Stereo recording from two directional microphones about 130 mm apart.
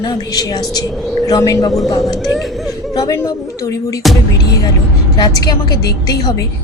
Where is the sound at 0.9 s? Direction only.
Centre (ahead or behind).